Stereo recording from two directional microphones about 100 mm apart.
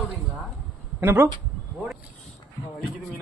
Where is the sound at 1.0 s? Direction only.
25° right (ahead or behind).